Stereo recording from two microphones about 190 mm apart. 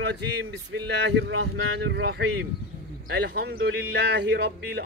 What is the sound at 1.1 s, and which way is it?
Speech, 65° right (ahead or behind).